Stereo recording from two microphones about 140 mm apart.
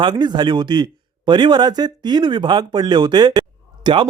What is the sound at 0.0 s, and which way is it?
Speech, 35° right (ahead or behind).